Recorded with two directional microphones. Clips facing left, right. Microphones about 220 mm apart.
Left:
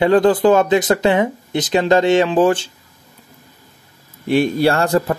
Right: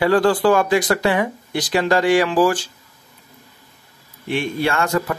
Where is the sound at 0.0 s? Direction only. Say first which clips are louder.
Left 3 dB; 20° left (ahead or behind).